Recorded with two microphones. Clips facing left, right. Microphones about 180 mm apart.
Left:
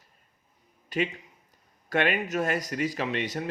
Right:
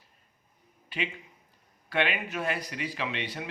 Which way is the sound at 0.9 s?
45° left (ahead or behind).